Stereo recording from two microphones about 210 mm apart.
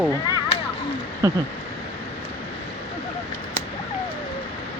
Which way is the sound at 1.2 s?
15° right (ahead or behind).